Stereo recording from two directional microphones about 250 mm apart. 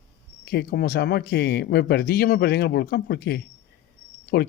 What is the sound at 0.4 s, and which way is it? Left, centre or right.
Speech, left.